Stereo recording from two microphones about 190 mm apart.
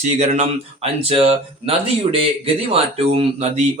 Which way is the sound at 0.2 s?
35° right (ahead or behind).